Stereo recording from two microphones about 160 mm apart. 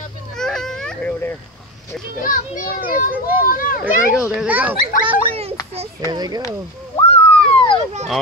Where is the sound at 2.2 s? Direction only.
60° left (ahead or behind).